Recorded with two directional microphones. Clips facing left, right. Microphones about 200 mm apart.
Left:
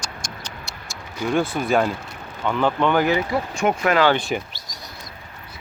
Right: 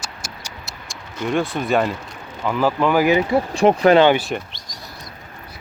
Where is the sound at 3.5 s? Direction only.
35° right (ahead or behind).